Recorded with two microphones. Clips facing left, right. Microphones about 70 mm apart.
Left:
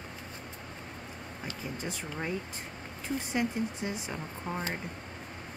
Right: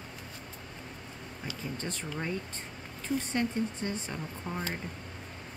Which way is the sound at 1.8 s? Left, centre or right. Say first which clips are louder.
Even; centre.